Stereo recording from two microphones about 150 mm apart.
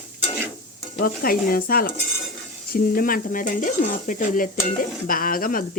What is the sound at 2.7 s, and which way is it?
Stir, 80° left.